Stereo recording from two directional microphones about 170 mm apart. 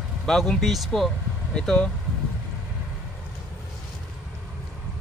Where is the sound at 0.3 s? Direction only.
Centre (ahead or behind).